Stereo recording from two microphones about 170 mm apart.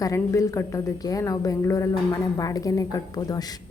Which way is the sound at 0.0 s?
20° left (ahead or behind).